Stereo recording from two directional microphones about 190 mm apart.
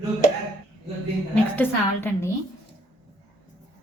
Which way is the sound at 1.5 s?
10° left (ahead or behind).